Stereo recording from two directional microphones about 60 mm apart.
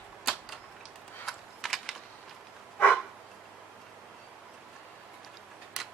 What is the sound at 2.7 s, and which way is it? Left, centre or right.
Dog, left.